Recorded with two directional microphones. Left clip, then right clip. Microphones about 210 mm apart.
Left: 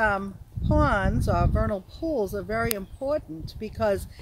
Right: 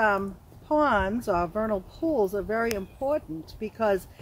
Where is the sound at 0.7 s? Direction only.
35° left (ahead or behind).